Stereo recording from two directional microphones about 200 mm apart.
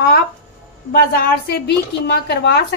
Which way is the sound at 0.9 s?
50° left (ahead or behind).